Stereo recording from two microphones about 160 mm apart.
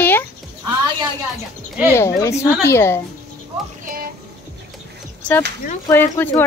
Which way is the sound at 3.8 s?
65° right (ahead or behind).